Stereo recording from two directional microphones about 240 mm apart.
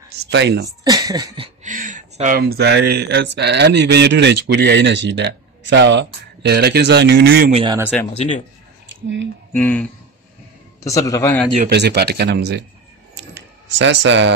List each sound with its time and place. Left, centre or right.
0.1 s speech: right
0.8 s speech: centre; by 7.5 s right
7.5 s speech: centre
8.1 s speech: left
9.5 s a man's voice: centre
11.5 s speech: right
13.1 s a sound: right